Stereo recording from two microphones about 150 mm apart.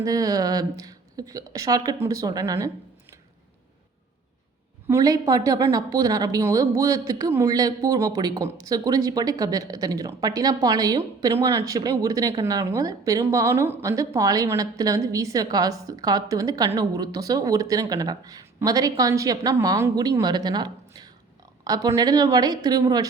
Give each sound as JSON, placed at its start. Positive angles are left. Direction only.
{"t": 0.0, "sound": "a woman's voice", "side_deg": -25}
{"t": 4.9, "sound": "a woman's voice", "side_deg": -20}